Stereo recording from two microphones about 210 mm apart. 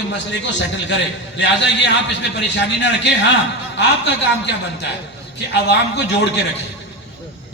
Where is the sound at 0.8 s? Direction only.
60° left (ahead or behind).